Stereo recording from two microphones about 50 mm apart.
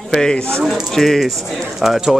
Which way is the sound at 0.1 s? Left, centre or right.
Centre.